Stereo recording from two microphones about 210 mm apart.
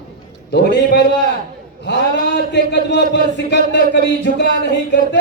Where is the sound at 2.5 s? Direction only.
55° left (ahead or behind).